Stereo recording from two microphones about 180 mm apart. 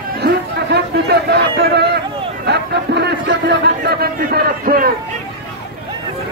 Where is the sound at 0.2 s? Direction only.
70° right (ahead or behind).